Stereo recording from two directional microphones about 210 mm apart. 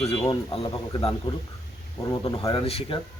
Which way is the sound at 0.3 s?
25° left (ahead or behind).